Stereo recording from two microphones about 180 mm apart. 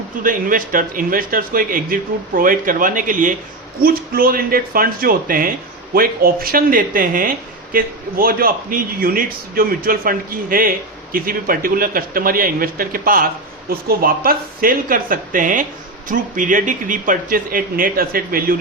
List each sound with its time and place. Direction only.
0.2 s speech: 50° right (ahead or behind)